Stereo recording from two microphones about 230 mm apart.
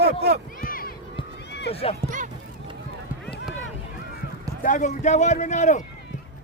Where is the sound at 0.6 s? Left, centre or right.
Left.